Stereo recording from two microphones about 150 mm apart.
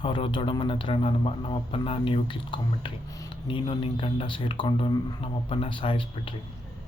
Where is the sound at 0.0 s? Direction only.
35° left (ahead or behind).